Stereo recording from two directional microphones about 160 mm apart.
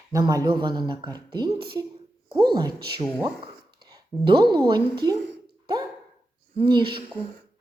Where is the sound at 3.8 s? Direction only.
25° right (ahead or behind).